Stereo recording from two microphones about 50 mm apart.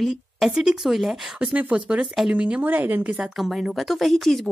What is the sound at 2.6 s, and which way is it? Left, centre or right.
Speech, right.